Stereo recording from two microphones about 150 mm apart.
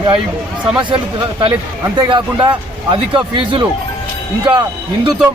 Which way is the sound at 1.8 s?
30° right (ahead or behind).